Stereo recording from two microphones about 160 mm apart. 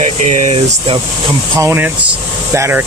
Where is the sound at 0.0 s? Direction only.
45° right (ahead or behind).